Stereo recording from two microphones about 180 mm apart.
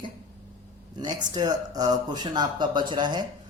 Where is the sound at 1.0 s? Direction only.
25° right (ahead or behind).